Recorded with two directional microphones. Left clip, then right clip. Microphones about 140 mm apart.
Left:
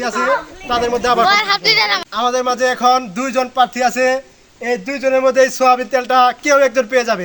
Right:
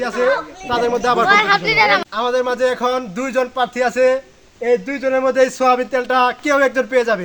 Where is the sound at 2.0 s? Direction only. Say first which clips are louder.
Left 2 dB; 10° right (ahead or behind).